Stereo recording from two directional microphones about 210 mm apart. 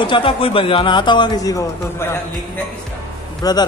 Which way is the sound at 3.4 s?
15° left (ahead or behind).